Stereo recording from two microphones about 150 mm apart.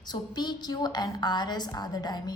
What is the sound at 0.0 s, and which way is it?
A woman's voice, 30° left (ahead or behind).